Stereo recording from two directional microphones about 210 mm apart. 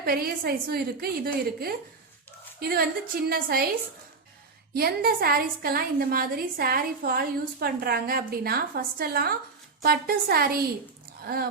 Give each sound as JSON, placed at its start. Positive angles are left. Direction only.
{"t": 0.0, "sound": "a woman's voice", "side_deg": -45}
{"t": 4.7, "sound": "a woman's voice", "side_deg": -50}